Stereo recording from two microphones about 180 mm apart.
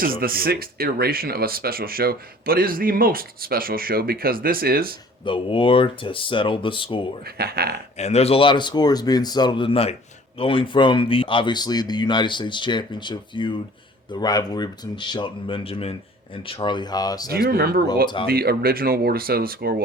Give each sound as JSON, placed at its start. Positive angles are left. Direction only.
{"t": 0.0, "sound": "speech", "side_deg": -55}
{"t": 5.2, "sound": "speech", "side_deg": 30}
{"t": 7.3, "sound": "speech", "side_deg": -60}
{"t": 7.9, "sound": "speech", "side_deg": 35}
{"t": 17.3, "sound": "speech", "side_deg": -55}